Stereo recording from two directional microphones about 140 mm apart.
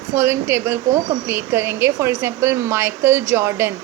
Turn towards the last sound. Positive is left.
turn(degrees=-20)  # may be behind; listen again after turning